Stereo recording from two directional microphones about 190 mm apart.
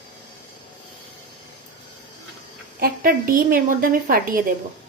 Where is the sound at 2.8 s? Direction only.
50° right (ahead or behind).